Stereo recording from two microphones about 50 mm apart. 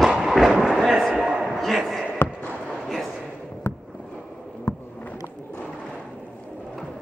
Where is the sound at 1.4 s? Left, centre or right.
Centre.